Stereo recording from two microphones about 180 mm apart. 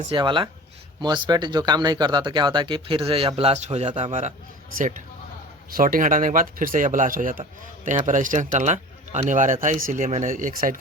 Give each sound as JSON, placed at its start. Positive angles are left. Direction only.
{"t": 0.0, "sound": "speech", "side_deg": -30}
{"t": 4.8, "sound": "speech", "side_deg": -45}